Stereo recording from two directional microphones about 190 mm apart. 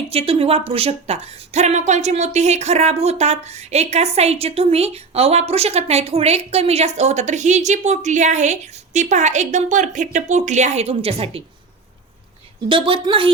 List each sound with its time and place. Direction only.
0.1 s a woman's voice: 30° right (ahead or behind)
12.6 s a woman's voice: 25° right (ahead or behind)